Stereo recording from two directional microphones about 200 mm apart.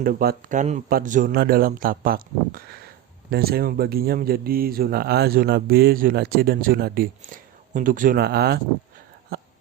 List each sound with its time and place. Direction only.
0.0 s speech: 45° right (ahead or behind)